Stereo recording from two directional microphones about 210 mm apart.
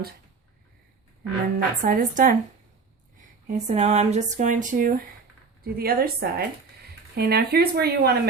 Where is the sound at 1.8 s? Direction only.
40° right (ahead or behind).